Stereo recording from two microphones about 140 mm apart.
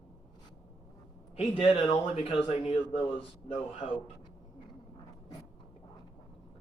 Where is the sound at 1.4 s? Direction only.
45° left (ahead or behind).